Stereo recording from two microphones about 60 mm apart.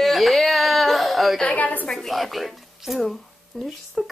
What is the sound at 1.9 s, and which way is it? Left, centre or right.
A woman's voice, centre.